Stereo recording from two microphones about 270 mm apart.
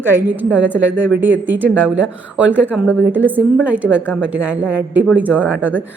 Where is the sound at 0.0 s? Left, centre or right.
Centre.